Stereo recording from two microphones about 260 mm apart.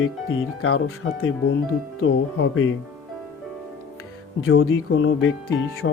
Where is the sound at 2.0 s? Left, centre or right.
Left.